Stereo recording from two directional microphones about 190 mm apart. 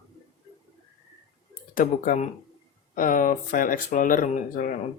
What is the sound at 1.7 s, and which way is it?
Speech, 45° left (ahead or behind).